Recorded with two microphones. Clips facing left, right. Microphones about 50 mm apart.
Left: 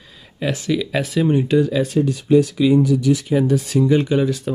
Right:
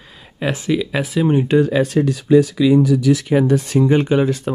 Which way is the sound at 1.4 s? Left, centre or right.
Right.